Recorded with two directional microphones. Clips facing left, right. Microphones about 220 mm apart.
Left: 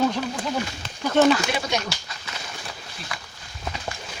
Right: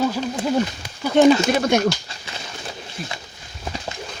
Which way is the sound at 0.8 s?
15° right (ahead or behind).